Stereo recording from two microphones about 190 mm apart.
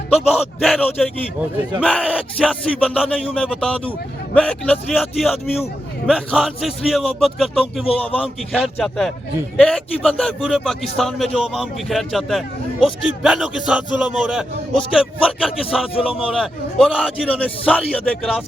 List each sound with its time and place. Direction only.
0.1 s a man's voice: 10° left (ahead or behind)
7.9 s a man's voice: 30° left (ahead or behind)
8.5 s a man's voice: centre (ahead or behind)
16.0 s a man's voice: 30° left (ahead or behind)
16.2 s a man's voice: 5° right (ahead or behind)